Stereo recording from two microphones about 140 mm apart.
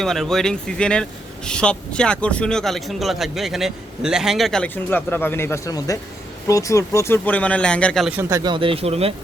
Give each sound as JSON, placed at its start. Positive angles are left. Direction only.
{"t": 0.0, "sound": "speech", "side_deg": 5}
{"t": 8.0, "sound": "speech", "side_deg": -10}
{"t": 8.3, "sound": "speech", "side_deg": -25}
{"t": 8.5, "sound": "speech", "side_deg": -40}